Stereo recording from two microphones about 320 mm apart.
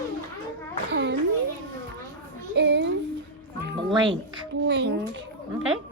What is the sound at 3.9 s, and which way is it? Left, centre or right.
Speech, centre.